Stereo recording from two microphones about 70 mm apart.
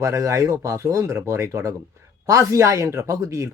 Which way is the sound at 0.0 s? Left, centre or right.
Right.